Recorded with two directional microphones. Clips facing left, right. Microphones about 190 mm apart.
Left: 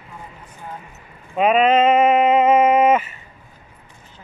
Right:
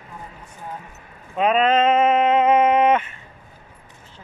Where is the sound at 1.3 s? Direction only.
10° left (ahead or behind).